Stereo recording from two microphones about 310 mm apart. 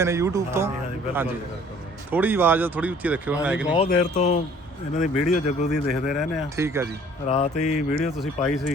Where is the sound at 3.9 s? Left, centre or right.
Left.